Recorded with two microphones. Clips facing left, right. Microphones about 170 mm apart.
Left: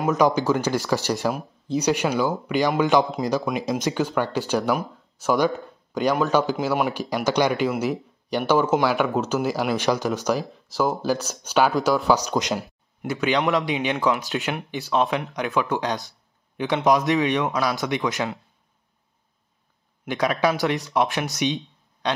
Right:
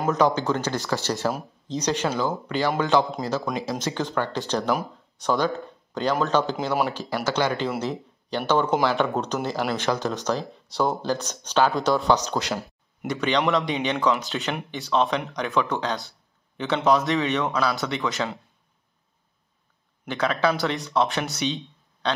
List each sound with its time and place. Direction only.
0.0 s speech: 10° left (ahead or behind)
6.9 s speech: 15° left (ahead or behind)
7.7 s speech: centre (ahead or behind)
8.3 s speech: 10° left (ahead or behind)
10.4 s speech: centre (ahead or behind)
12.3 s speech: 15° left (ahead or behind)
13.0 s speech: 5° left (ahead or behind)
20.1 s speech: 15° left (ahead or behind)